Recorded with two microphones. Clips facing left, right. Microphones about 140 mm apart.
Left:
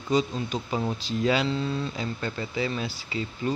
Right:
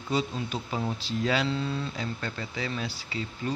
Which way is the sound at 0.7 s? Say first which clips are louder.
Left 3 dB; 10° left (ahead or behind).